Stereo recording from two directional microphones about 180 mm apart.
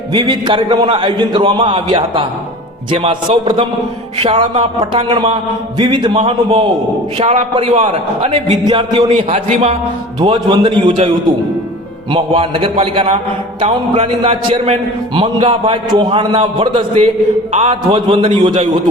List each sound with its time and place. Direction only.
0.1 s a man's voice: 25° right (ahead or behind)
10.2 s a man's voice: 25° right (ahead or behind)
12.1 s a man's voice: 30° right (ahead or behind)